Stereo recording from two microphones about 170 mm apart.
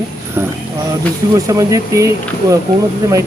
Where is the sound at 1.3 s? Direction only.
20° right (ahead or behind).